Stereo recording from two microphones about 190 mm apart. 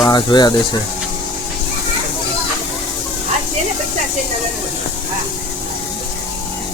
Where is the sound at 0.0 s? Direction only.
20° left (ahead or behind).